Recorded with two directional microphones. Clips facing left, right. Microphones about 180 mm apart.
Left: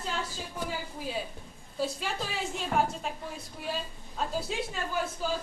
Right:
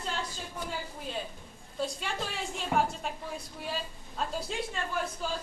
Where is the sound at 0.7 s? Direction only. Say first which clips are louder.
Left 2 dB; 5° left (ahead or behind).